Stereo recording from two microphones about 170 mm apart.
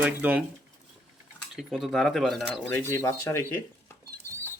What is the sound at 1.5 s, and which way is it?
Speech, centre (ahead or behind).